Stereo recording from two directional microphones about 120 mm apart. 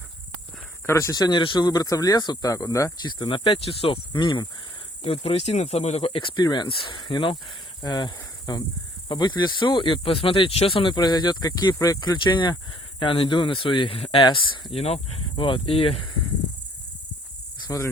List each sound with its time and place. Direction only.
0.9 s speech: 25° left (ahead or behind)
3.1 s speech: 40° left (ahead or behind)
5.0 s speech: 55° left (ahead or behind)
14.2 s speech: 40° left (ahead or behind)
14.8 s speech: 60° left (ahead or behind)